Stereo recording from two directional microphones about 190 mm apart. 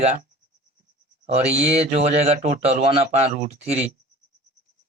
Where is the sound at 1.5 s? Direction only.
35° right (ahead or behind).